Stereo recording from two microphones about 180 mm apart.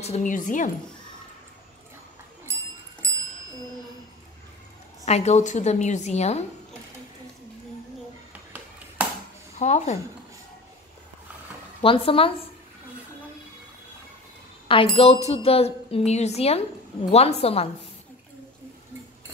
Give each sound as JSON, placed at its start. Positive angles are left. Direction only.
{"t": 0.0, "sound": "speech", "side_deg": 40}
{"t": 5.0, "sound": "a woman's voice", "side_deg": 40}
{"t": 9.6, "sound": "a woman's voice", "side_deg": 40}
{"t": 11.8, "sound": "a woman's voice", "side_deg": 30}
{"t": 14.7, "sound": "a woman's voice", "side_deg": 30}